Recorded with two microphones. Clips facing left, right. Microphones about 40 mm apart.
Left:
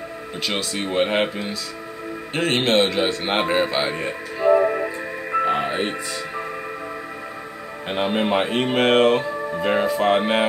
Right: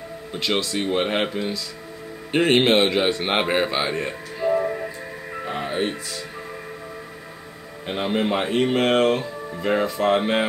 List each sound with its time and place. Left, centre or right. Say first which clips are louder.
0.4 s speech: right 2 dB; centre
2.3 s a man's voice: right 2 dB; centre
4.5 s music: left 6 dB; left
7.9 s speech: left 2 dB; left